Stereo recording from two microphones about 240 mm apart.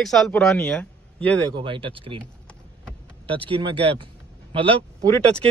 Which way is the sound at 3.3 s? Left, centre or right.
Right.